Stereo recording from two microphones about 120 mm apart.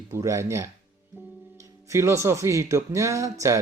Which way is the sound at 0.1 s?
25° right (ahead or behind).